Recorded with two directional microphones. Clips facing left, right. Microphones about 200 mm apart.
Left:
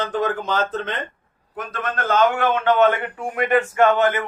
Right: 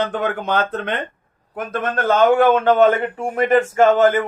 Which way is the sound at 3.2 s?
45° right (ahead or behind).